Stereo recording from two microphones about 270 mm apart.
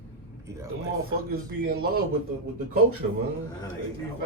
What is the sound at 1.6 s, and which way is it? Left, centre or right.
Speech, right.